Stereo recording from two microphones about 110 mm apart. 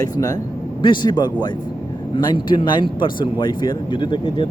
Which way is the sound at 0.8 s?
45° left (ahead or behind).